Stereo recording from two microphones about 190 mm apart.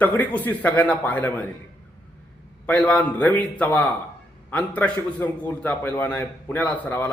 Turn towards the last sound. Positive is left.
turn(degrees=10)  # may be behind; listen again after turning